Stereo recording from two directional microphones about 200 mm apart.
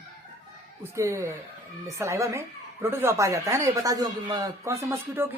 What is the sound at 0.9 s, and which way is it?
A woman's voice, 15° right (ahead or behind).